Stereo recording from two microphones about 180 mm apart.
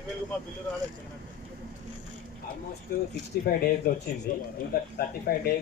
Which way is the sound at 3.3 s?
60° left (ahead or behind).